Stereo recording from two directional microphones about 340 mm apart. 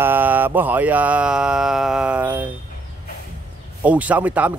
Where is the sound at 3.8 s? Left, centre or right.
Centre.